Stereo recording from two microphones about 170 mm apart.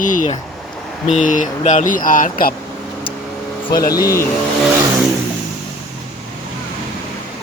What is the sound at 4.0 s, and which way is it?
Speech, 20° left (ahead or behind).